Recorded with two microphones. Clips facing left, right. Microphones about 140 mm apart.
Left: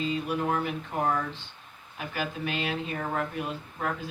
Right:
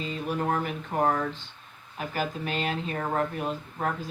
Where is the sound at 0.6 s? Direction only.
45° right (ahead or behind).